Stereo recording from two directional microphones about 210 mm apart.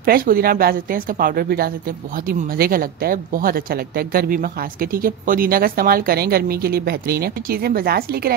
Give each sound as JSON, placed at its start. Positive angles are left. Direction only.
{"t": 0.0, "sound": "speech", "side_deg": -45}